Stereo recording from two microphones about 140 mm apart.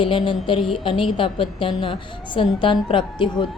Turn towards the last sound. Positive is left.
turn(degrees=35)  # may be behind; listen again after turning